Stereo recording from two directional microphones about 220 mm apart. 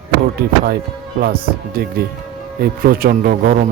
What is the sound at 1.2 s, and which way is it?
Speech, 45° right (ahead or behind).